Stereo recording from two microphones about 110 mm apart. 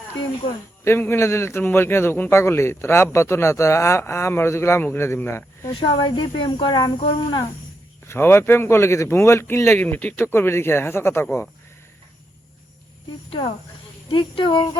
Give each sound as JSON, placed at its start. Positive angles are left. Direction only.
{"t": 0.9, "sound": "a man's voice", "side_deg": 25}
{"t": 6.0, "sound": "speech", "side_deg": 45}
{"t": 8.0, "sound": "a man's voice", "side_deg": 20}
{"t": 14.1, "sound": "speech", "side_deg": 50}